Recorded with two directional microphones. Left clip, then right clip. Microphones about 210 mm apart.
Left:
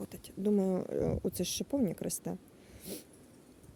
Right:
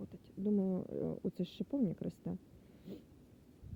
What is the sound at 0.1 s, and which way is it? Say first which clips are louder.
Speech: left 6 dB; 15° left (ahead or behind).